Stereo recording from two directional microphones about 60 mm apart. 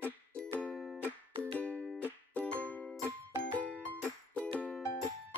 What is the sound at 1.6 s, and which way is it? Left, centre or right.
Music, left.